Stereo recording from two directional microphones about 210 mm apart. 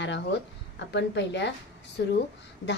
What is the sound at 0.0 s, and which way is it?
A woman's voice, 55° left (ahead or behind).